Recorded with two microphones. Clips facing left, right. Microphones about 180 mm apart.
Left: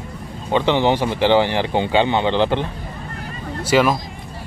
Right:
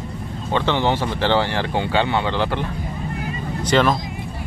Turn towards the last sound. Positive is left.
turn(degrees=5)  # may be behind; listen again after turning